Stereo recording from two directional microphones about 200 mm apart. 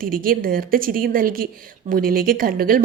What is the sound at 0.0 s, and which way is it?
A woman's voice, 45° right (ahead or behind).